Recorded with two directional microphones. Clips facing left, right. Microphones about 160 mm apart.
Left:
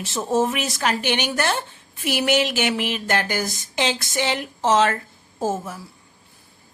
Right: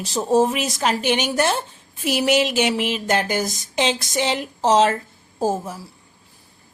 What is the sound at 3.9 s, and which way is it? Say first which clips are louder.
A woman's voice: right 1 dB; 35° right (ahead or behind).